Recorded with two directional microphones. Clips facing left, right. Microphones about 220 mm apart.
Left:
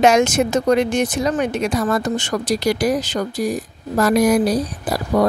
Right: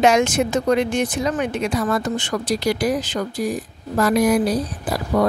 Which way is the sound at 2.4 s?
85° left.